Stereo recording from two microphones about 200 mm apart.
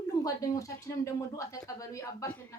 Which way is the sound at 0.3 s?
15° left (ahead or behind).